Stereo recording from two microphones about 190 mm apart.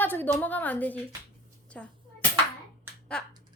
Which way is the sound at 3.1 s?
5° left (ahead or behind).